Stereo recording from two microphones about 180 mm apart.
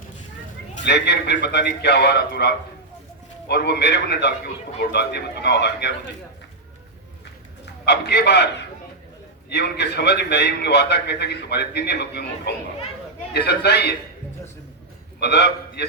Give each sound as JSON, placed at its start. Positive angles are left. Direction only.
{"t": 0.9, "sound": "a man's voice", "side_deg": 70}
{"t": 7.6, "sound": "a man's voice", "side_deg": 70}
{"t": 9.5, "sound": "a man's voice", "side_deg": 65}
{"t": 15.2, "sound": "a man's voice", "side_deg": 70}